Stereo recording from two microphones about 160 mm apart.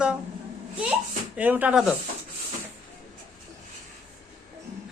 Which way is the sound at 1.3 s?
10° right (ahead or behind).